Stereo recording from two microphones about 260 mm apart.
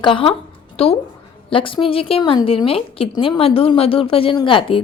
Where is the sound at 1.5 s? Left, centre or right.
Centre.